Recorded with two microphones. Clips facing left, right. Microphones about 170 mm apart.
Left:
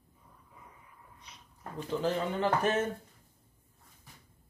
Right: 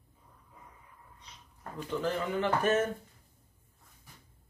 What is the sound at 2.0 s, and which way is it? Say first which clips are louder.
Speech: even; 35° left (ahead or behind).